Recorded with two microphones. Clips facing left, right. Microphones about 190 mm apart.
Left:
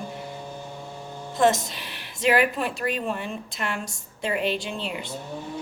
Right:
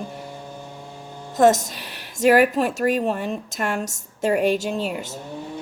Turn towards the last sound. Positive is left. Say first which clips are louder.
# right 5 dB
turn(degrees=-45)  # may be behind; listen again after turning